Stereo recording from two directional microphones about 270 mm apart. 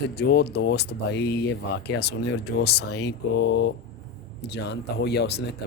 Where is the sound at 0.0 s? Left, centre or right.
Left.